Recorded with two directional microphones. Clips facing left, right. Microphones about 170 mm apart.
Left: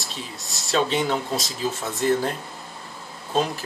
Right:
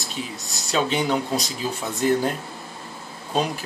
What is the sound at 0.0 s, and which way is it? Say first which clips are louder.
Speech: right 4 dB; centre (ahead or behind).